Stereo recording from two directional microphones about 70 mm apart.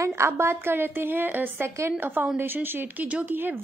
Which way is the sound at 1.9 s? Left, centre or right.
Right.